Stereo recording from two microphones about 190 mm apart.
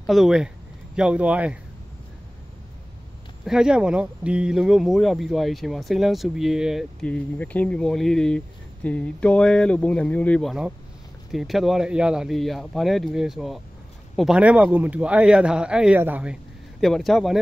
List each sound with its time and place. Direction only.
0.0 s speech: centre (ahead or behind)
3.4 s speech: 5° right (ahead or behind)